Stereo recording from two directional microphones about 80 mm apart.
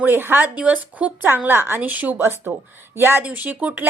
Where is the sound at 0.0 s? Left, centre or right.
Right.